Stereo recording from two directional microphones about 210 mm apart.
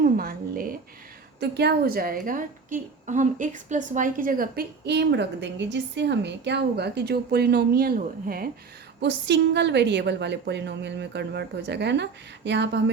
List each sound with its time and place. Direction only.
0.0 s a sound: 45° right (ahead or behind)
1.4 s a woman's voice: 50° right (ahead or behind)
9.0 s a woman's voice: 55° right (ahead or behind)